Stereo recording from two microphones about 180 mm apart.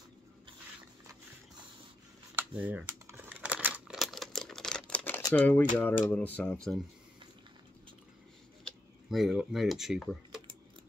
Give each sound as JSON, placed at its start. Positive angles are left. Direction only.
{"t": 2.3, "sound": "crumpling", "side_deg": -10}
{"t": 6.0, "sound": "speech", "side_deg": 10}
{"t": 8.6, "sound": "speech", "side_deg": 0}